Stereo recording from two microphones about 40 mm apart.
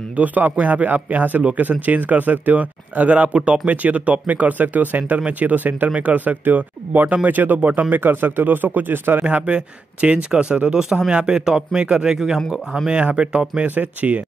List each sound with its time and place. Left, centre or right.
0.1 s speech: right
7.9 s speech: right
8.9 s speech: right
9.2 s a man's voice: right
13.7 s speech: right